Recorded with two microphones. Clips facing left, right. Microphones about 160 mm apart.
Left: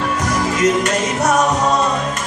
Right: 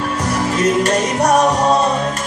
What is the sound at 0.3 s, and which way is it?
Music, 30° right (ahead or behind).